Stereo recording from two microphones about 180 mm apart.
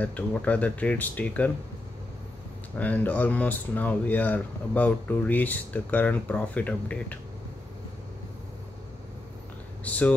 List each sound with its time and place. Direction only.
0.0 s speech: 10° left (ahead or behind)
2.8 s speech: 10° left (ahead or behind)
9.8 s speech: 10° left (ahead or behind)